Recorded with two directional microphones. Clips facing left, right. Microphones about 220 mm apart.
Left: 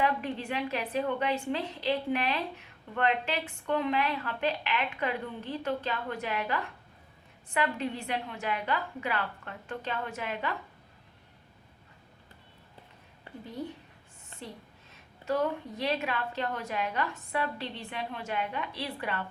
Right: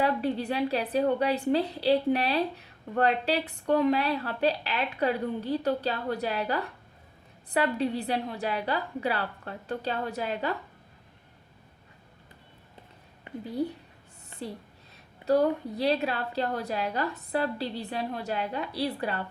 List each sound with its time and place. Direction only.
0.0 s a woman's voice: 35° right (ahead or behind)
15.2 s a woman's voice: 35° right (ahead or behind)